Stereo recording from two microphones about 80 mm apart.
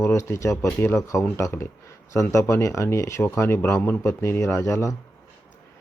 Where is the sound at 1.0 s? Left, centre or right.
Left.